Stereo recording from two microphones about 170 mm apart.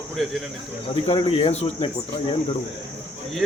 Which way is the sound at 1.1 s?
35° left (ahead or behind).